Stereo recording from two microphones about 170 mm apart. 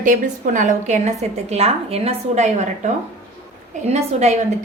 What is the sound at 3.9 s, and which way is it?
Speech, 40° right (ahead or behind).